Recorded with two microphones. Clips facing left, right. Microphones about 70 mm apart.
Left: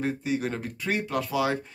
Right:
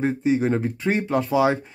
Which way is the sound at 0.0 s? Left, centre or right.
Right.